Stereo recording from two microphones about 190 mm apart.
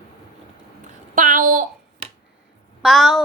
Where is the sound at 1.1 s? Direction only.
45° right (ahead or behind).